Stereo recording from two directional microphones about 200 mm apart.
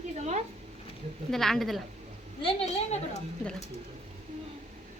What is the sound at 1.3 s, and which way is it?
Speech, centre (ahead or behind).